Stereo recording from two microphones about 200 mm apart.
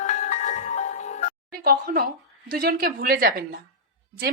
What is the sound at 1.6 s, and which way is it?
A woman's voice, 50° right (ahead or behind).